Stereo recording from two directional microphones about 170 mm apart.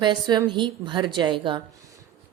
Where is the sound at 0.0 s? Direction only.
25° right (ahead or behind).